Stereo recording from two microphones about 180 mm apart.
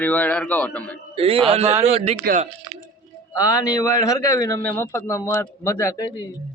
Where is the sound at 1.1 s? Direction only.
30° right (ahead or behind).